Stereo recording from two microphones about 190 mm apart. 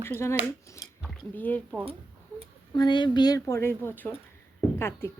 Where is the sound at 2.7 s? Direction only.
25° left (ahead or behind).